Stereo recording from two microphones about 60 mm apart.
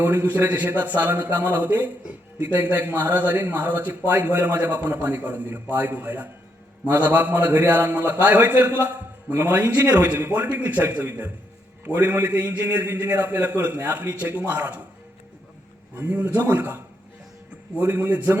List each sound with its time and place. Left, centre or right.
0.0 s a man's voice: right
16.0 s a man's voice: right
17.7 s a man's voice: right